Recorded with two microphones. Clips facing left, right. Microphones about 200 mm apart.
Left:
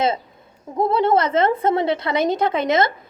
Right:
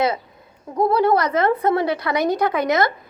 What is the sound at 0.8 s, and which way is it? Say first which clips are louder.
A woman's voice: even; 25° left (ahead or behind).